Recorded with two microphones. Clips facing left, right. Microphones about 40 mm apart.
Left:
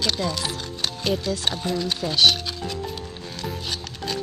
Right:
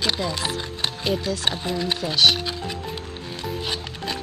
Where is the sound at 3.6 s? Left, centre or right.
Right.